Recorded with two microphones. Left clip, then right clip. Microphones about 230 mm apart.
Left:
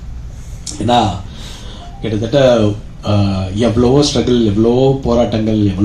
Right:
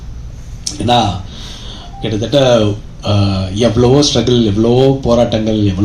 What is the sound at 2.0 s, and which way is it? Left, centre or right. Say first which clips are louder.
A man's voice: even; right.